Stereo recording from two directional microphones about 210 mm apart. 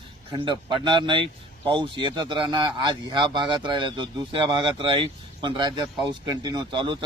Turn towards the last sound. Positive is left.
turn(degrees=-20)  # may be behind; listen again after turning